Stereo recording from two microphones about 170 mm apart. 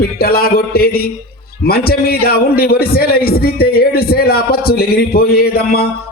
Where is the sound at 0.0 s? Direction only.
60° left (ahead or behind).